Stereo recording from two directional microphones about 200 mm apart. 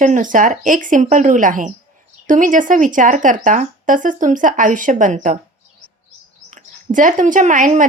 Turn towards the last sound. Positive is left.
turn(degrees=-40)  # may be behind; listen again after turning